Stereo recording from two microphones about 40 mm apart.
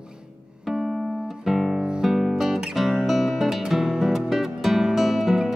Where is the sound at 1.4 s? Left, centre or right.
Centre.